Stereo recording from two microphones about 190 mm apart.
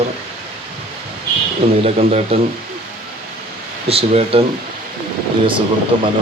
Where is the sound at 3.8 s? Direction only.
30° right (ahead or behind).